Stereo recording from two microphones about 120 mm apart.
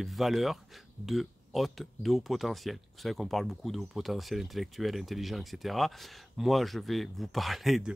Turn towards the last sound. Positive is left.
turn(degrees=0)  # may be behind; listen again after turning